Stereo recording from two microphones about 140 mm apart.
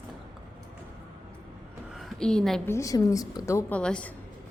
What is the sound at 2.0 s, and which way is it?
Speech, 5° left (ahead or behind).